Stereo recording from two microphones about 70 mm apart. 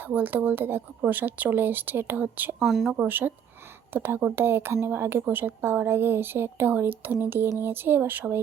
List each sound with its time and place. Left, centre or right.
0.0 s speech: right
2.6 s speech: centre
3.1 s a woman's voice: right